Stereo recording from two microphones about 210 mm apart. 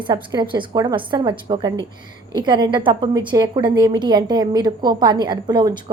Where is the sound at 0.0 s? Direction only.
20° right (ahead or behind).